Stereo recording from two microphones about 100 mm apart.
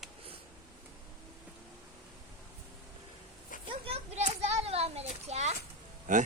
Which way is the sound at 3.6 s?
75° right (ahead or behind).